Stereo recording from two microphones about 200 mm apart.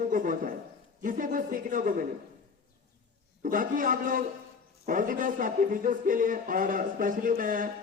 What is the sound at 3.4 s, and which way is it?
Speech, 45° right (ahead or behind).